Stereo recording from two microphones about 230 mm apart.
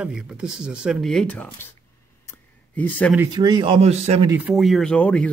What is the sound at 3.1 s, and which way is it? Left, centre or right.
Speech, centre.